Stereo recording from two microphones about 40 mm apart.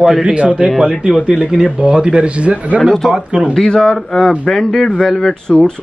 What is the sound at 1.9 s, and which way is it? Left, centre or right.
Speech, centre.